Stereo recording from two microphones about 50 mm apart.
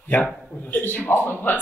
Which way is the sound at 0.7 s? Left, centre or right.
Left.